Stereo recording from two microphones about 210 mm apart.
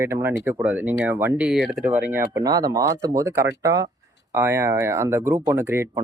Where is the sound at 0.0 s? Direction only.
10° right (ahead or behind).